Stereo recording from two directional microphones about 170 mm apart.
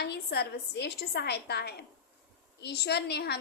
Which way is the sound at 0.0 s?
75° left (ahead or behind).